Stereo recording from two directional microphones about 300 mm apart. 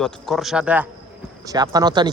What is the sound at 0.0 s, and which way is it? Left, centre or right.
Speech, centre.